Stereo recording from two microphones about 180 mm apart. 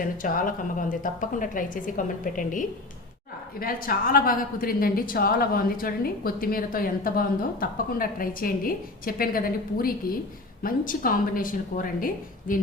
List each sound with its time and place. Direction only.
0.0 s a woman's voice: 50° left (ahead or behind)